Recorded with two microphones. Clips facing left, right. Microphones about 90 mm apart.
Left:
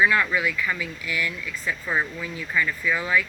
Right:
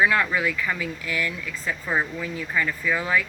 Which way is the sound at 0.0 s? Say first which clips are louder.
Even; 35° right (ahead or behind).